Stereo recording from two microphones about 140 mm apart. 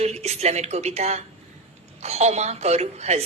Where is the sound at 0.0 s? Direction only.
50° right (ahead or behind).